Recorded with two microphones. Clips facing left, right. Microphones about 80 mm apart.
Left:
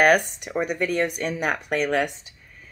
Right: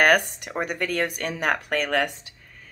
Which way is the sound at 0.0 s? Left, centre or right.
Right.